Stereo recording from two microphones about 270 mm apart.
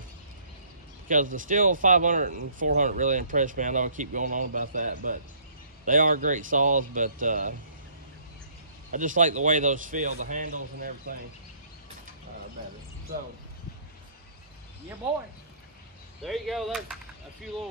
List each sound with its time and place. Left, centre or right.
1.0 s speech: right
8.9 s speech: right
16.2 s speech: centre